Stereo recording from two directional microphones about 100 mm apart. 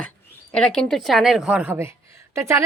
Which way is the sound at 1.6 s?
25° right (ahead or behind).